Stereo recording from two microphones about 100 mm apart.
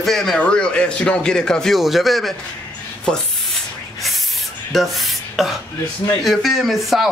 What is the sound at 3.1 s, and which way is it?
Spray, centre (ahead or behind).